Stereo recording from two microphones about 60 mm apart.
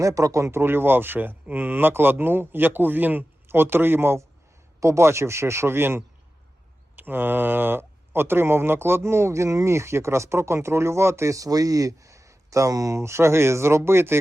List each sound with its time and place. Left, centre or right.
0.0 s speech: right
0.6 s speech: right
11.3 s speech: right
13.0 s speech: right